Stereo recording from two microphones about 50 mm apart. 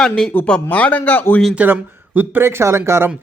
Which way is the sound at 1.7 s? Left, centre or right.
Right.